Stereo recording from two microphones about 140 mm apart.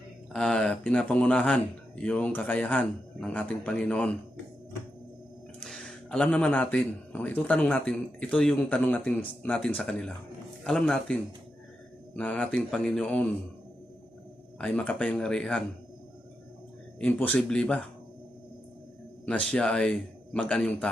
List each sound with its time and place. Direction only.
0.3 s speech: 5° left (ahead or behind)
5.5 s speech: centre (ahead or behind)
14.6 s speech: 10° left (ahead or behind)
17.0 s speech: 10° left (ahead or behind)
19.2 s speech: 10° left (ahead or behind)